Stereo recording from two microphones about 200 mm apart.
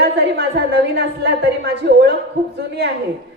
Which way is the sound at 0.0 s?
55° right (ahead or behind).